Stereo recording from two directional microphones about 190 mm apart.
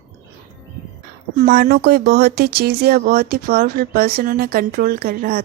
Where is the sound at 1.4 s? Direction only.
50° right (ahead or behind).